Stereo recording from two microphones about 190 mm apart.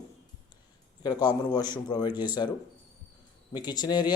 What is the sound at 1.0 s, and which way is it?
Speech, 20° left (ahead or behind).